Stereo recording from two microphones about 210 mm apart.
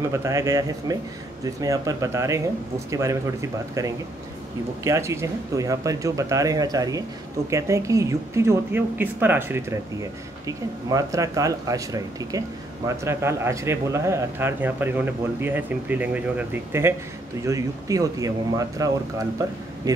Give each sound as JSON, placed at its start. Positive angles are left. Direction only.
{"t": 0.1, "sound": "speech", "side_deg": -15}